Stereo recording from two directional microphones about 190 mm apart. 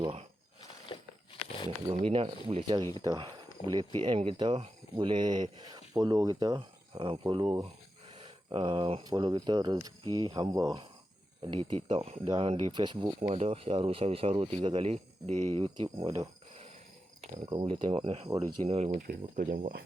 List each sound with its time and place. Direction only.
0.0 s speech: 30° right (ahead or behind)
0.9 s a sound: 25° left (ahead or behind)
1.9 s speech: 30° right (ahead or behind)
17.3 s speech: 25° right (ahead or behind); by 19.8 s 45° right (ahead or behind)